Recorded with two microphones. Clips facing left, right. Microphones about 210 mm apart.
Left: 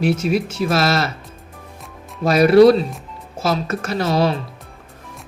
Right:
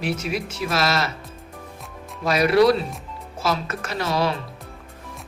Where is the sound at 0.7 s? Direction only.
30° left (ahead or behind).